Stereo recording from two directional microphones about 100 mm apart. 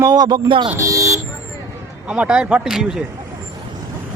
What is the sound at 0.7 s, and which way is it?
Vehicle, 30° right (ahead or behind).